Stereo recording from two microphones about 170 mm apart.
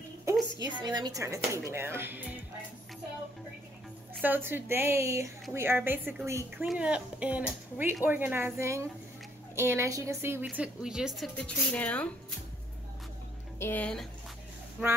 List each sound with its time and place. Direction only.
0.2 s a sound: 15° right (ahead or behind)
0.7 s speech: 25° right (ahead or behind)
4.2 s speech: 10° right (ahead or behind)
10.4 s a woman's voice: 5° right (ahead or behind)
13.6 s speech: 10° left (ahead or behind)